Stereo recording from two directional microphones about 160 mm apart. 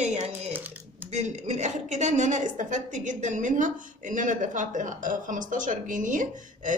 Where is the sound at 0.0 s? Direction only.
45° right (ahead or behind).